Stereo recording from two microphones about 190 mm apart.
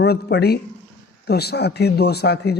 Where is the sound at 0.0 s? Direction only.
60° left (ahead or behind).